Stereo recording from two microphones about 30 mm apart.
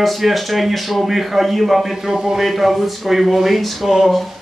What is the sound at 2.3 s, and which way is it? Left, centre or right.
Speech, centre.